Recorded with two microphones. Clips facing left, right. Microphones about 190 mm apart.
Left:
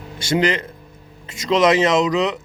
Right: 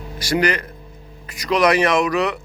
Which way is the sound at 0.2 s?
25° left (ahead or behind).